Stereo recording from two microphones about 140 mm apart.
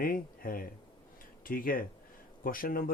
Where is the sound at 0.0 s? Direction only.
90° left.